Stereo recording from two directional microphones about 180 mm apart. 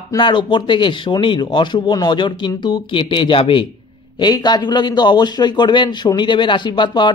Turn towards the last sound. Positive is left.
turn(degrees=25)  # may be behind; listen again after turning